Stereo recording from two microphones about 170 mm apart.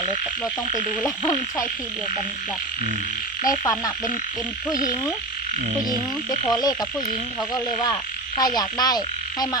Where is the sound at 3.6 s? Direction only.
20° left (ahead or behind).